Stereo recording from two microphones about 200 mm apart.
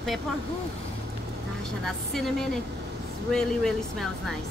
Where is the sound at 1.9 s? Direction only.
Centre (ahead or behind).